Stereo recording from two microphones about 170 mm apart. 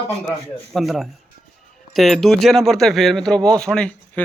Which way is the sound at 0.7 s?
Centre (ahead or behind).